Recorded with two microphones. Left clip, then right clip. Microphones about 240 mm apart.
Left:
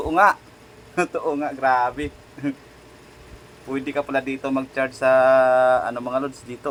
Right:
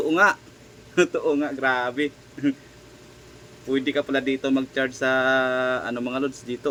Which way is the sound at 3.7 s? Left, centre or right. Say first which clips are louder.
Right 2 dB; left.